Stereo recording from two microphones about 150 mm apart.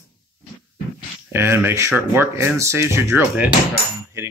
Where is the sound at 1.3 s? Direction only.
15° right (ahead or behind).